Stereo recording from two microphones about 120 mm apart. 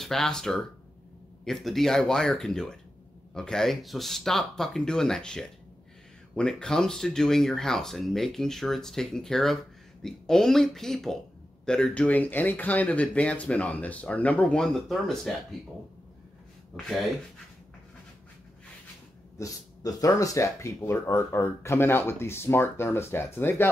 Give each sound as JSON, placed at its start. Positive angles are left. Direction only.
{"t": 0.0, "sound": "speech", "side_deg": 5}
{"t": 16.7, "sound": "speech", "side_deg": 0}
{"t": 19.3, "sound": "speech", "side_deg": 30}